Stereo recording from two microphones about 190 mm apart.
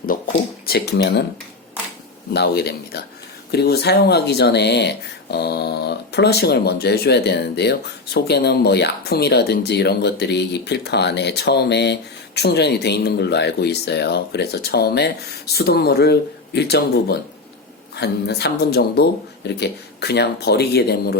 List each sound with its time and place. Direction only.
0.1 s a sound: 45° left (ahead or behind)
0.6 s speech: 55° left (ahead or behind)
2.3 s speech: 60° left (ahead or behind)